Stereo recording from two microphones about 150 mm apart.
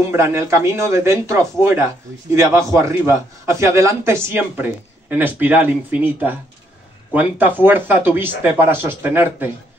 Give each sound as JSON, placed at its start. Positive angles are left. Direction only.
{"t": 0.1, "sound": "speech", "side_deg": -20}